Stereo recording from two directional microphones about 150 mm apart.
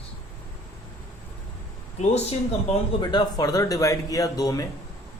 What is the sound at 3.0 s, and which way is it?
Speech, 30° left (ahead or behind).